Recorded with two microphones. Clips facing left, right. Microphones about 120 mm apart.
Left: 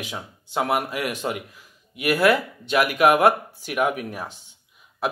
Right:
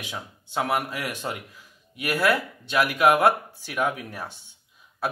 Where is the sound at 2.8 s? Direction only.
15° left (ahead or behind).